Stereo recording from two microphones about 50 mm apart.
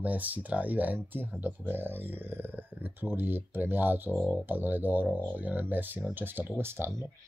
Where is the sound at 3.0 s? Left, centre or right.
Right.